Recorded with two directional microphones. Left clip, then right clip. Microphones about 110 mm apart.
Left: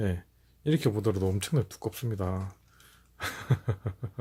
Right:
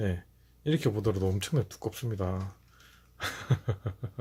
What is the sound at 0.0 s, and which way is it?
Speech, 25° left (ahead or behind).